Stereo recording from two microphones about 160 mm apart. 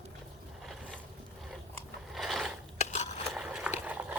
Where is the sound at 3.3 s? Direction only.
5° right (ahead or behind).